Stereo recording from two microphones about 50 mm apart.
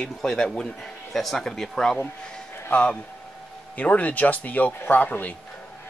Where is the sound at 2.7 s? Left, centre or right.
Left.